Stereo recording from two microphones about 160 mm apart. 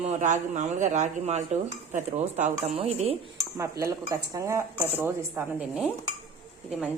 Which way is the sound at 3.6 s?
20° right (ahead or behind).